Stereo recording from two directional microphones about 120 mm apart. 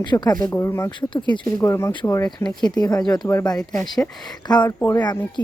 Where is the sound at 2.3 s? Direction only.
35° left (ahead or behind).